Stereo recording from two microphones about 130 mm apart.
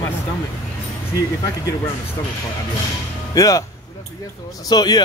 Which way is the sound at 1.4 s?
25° left (ahead or behind).